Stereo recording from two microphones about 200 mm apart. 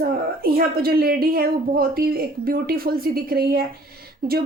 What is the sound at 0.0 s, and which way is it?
Speech, 50° right (ahead or behind).